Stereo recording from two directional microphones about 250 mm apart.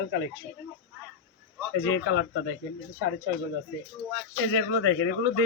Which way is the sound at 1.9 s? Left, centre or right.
Left.